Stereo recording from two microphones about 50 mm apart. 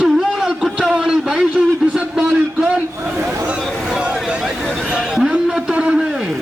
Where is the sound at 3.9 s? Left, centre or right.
Centre.